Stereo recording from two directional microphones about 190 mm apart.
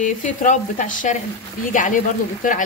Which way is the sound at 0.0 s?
40° left (ahead or behind).